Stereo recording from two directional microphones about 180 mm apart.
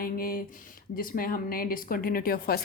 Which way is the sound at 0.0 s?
55° left (ahead or behind).